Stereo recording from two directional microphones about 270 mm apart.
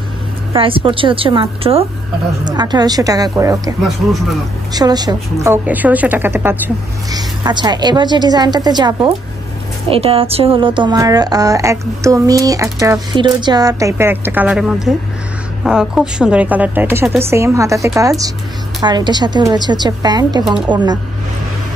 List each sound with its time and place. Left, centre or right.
0.5 s a woman's voice: centre
4.7 s a woman's voice: centre